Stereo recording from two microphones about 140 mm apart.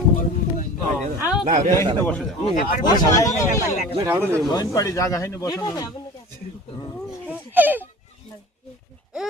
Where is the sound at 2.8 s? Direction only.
20° left (ahead or behind).